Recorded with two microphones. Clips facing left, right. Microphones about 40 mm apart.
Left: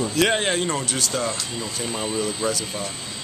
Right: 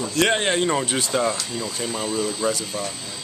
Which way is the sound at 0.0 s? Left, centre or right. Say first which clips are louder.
Even; centre.